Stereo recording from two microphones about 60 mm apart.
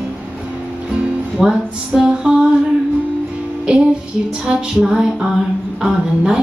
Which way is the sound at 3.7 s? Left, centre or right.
Centre.